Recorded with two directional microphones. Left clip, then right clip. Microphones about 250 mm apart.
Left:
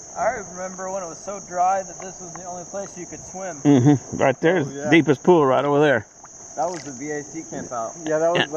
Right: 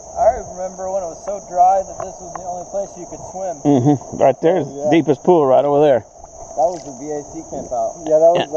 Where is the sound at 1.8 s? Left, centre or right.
Centre.